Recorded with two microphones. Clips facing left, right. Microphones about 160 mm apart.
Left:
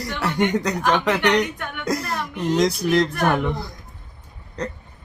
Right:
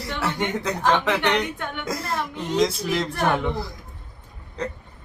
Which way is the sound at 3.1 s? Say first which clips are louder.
Left 2 dB; 25° right (ahead or behind).